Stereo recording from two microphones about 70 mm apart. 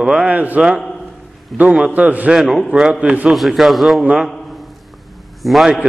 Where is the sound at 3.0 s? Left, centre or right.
Right.